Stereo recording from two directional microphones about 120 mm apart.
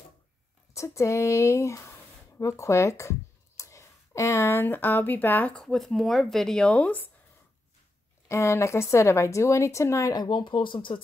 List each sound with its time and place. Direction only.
0.7 s speech: 25° left (ahead or behind)
8.3 s speech: 25° left (ahead or behind); by 11.0 s 45° left (ahead or behind)